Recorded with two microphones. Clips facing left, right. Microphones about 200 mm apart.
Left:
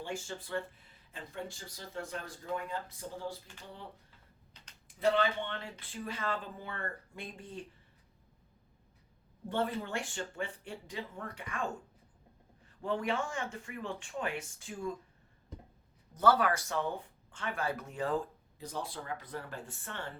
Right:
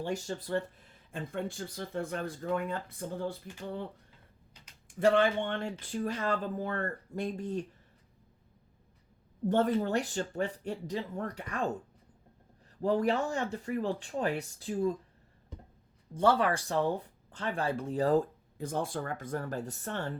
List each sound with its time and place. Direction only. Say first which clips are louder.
0.0 s speech: right 6 dB; 40° right (ahead or behind)
1.1 s speech: right 7 dB; 55° right (ahead or behind)
4.9 s speech: right 5 dB; 50° right (ahead or behind)
9.5 s speech: right 7 dB; 45° right (ahead or behind)
12.8 s speech: right 6 dB; 40° right (ahead or behind)
16.1 s speech: right 2 dB; 30° right (ahead or behind)